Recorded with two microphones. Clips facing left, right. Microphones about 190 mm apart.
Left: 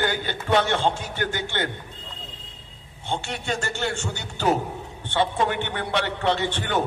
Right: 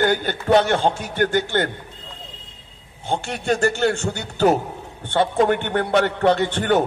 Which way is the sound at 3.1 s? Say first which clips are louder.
Right 6 dB; 55° right (ahead or behind).